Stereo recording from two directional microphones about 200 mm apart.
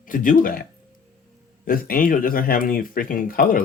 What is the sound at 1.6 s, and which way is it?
A man's voice, 45° left (ahead or behind).